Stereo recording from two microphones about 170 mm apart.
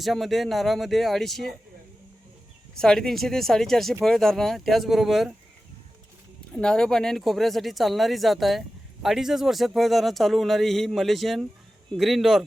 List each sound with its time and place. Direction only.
0.0 s a man's voice: centre (ahead or behind)
2.7 s a man's voice: 5° left (ahead or behind)
6.5 s a man's voice: 5° left (ahead or behind)